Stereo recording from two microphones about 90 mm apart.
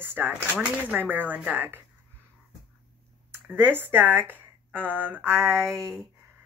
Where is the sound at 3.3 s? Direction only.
25° right (ahead or behind).